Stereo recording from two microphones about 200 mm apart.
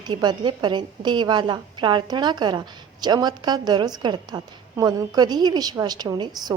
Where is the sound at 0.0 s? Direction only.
20° right (ahead or behind).